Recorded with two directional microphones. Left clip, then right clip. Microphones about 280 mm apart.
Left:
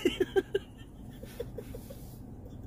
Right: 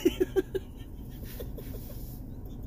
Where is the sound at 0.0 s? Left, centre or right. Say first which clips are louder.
Right 2 dB; left.